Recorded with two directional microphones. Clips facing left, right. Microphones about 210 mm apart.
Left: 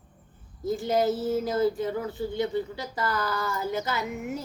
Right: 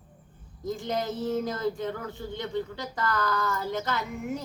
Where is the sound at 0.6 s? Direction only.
5° left (ahead or behind).